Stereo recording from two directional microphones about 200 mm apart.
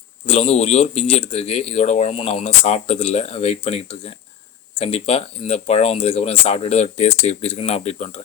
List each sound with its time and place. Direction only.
0.3 s speech: 30° left (ahead or behind)